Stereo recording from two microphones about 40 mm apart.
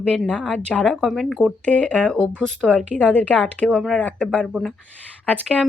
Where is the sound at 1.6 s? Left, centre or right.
Left.